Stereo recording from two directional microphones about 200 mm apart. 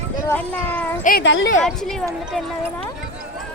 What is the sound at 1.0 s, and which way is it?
Speech, 55° left (ahead or behind).